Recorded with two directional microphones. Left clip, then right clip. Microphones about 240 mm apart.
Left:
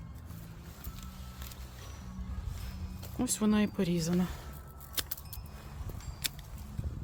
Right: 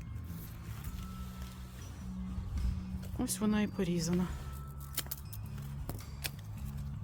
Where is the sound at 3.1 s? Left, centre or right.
Centre.